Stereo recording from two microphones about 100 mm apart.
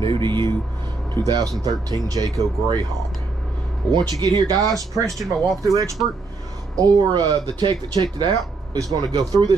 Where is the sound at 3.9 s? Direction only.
50° right (ahead or behind).